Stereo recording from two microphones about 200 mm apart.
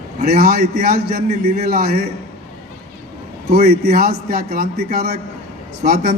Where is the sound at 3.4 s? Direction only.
55° right (ahead or behind).